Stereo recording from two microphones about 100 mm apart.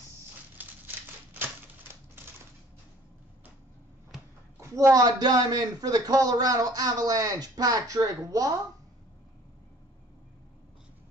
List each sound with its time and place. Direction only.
0.6 s crumpling: 20° right (ahead or behind)
4.6 s a man's voice: 30° right (ahead or behind)